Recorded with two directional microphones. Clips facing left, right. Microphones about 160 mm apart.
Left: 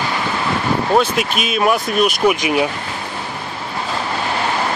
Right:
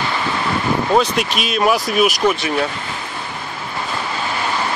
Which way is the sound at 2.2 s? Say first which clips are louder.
Left 2 dB; 15° left (ahead or behind).